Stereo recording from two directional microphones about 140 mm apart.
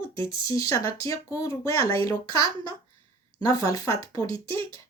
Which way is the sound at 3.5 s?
25° left (ahead or behind).